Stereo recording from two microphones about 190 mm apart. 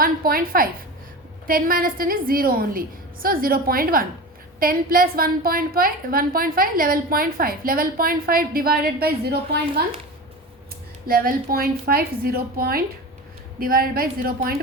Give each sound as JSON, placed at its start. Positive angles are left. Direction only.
{"t": 0.0, "sound": "a woman's voice", "side_deg": -50}
{"t": 11.0, "sound": "a woman's voice", "side_deg": -50}